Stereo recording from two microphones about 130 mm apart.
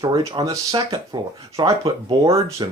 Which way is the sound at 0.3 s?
30° right (ahead or behind).